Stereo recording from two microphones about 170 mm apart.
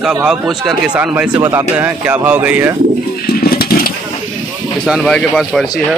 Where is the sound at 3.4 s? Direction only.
60° left (ahead or behind).